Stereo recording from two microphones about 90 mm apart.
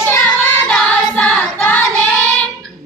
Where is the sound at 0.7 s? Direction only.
10° left (ahead or behind).